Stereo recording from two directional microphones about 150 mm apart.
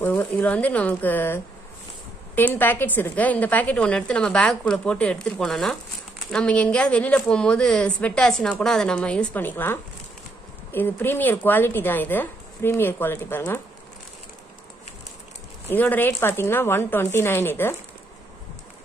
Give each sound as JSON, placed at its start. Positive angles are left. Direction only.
{"t": 0.0, "sound": "a woman's voice", "side_deg": 10}
{"t": 15.7, "sound": "a woman's voice", "side_deg": 10}